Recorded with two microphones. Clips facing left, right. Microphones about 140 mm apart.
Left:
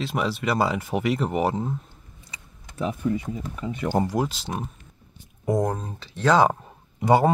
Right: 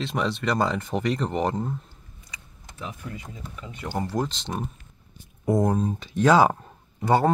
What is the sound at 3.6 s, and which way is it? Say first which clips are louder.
Speech: left 7 dB; 55° left (ahead or behind).